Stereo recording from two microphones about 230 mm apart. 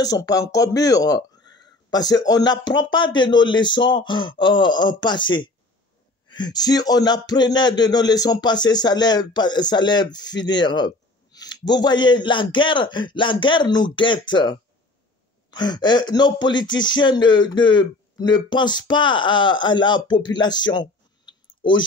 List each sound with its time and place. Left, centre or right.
0.0 s speech: centre